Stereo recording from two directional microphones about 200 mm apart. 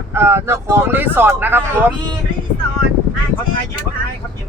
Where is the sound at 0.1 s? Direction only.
10° right (ahead or behind).